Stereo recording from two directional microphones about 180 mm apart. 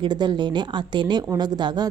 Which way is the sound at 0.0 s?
25° right (ahead or behind).